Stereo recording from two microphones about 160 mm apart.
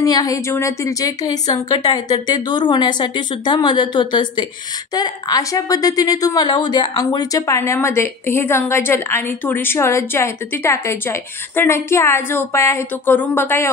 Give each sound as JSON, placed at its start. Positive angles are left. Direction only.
{"t": 0.0, "sound": "a woman's voice", "side_deg": 20}